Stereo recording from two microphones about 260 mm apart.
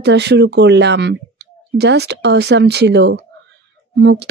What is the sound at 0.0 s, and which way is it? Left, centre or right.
A woman's voice, right.